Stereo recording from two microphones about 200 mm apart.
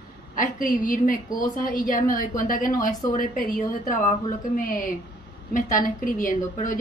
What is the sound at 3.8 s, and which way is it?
A woman's voice, 40° left (ahead or behind).